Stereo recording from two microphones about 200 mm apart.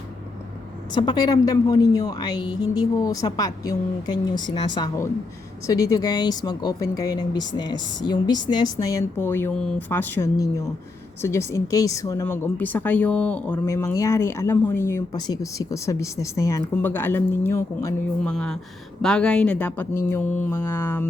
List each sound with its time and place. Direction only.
0.9 s a woman's voice: 20° left (ahead or behind)
18.2 s speech: 5° left (ahead or behind)